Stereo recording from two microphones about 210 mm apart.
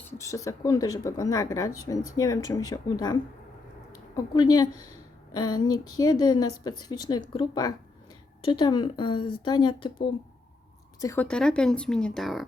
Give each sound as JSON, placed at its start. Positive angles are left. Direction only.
{"t": 0.1, "sound": "a woman's voice", "side_deg": 15}
{"t": 11.0, "sound": "speech", "side_deg": 10}